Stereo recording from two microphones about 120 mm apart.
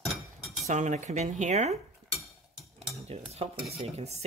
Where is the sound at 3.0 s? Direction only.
60° right (ahead or behind).